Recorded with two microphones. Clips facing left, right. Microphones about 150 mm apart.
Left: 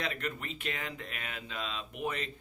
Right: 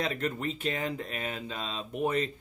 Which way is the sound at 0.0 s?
35° right (ahead or behind).